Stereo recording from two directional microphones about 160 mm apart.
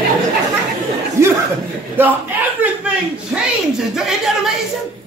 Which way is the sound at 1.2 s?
15° right (ahead or behind).